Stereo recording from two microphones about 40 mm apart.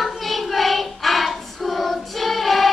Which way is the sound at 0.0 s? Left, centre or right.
Centre.